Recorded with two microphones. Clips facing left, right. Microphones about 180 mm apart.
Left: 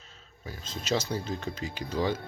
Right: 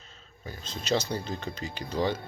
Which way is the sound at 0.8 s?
5° left (ahead or behind).